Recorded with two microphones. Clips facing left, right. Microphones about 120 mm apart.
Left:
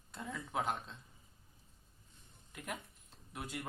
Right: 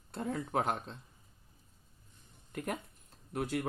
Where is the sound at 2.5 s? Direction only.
45° right (ahead or behind).